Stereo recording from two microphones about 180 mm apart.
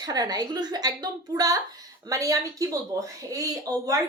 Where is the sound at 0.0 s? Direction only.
20° right (ahead or behind).